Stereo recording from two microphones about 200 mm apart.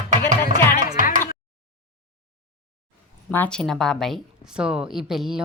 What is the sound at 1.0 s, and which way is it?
Music, 40° right (ahead or behind).